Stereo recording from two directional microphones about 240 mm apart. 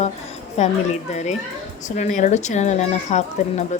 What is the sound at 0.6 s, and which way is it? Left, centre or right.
Speech, left.